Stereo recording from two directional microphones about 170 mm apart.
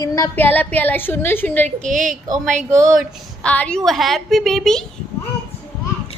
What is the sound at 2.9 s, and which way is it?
A woman's voice, 5° left (ahead or behind).